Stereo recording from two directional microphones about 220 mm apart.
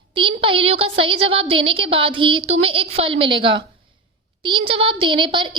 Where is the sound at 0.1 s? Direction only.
25° right (ahead or behind).